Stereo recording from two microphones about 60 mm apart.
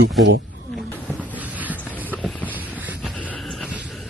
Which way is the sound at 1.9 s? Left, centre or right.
Left.